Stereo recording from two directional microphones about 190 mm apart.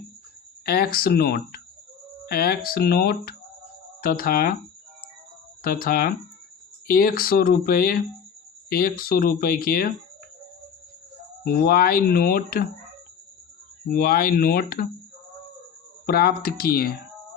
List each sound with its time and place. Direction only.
0.6 s speech: 50° left (ahead or behind)
5.6 s speech: 50° left (ahead or behind)
11.4 s speech: 50° left (ahead or behind)
13.8 s speech: 50° left (ahead or behind)
16.0 s speech: 50° left (ahead or behind)